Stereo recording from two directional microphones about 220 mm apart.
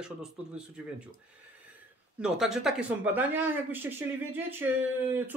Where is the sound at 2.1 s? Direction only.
5° right (ahead or behind).